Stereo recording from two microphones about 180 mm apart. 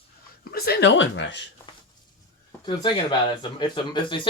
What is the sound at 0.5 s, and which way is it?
Speech, 60° left (ahead or behind).